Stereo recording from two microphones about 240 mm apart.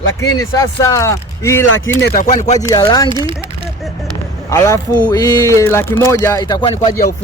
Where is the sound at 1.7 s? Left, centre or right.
Left.